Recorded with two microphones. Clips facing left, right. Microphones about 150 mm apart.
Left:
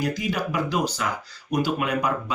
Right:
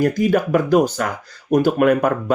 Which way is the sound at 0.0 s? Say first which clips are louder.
Right 9 dB; 50° right (ahead or behind).